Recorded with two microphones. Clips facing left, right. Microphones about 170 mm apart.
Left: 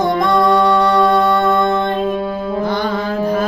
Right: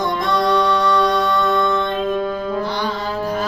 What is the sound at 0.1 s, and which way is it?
Music, 50° left (ahead or behind).